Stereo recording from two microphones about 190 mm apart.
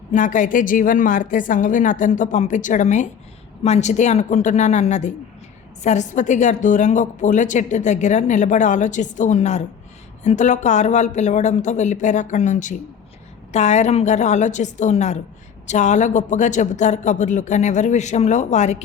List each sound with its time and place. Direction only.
0.1 s a woman's voice: 40° left (ahead or behind)